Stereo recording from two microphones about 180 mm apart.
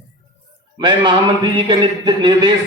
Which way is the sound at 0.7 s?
25° right (ahead or behind).